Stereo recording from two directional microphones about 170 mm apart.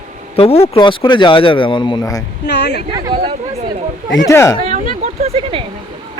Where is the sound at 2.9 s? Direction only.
25° right (ahead or behind).